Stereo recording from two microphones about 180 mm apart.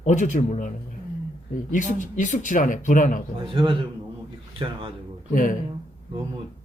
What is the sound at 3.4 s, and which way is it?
Speech, 30° right (ahead or behind).